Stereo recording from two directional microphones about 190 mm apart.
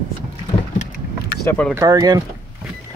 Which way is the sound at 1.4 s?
10° left (ahead or behind).